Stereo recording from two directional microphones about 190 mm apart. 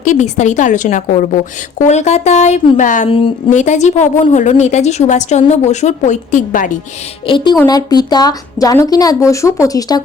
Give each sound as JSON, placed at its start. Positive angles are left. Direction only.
{"t": 0.0, "sound": "a woman's voice", "side_deg": 40}
{"t": 7.3, "sound": "speech", "side_deg": 25}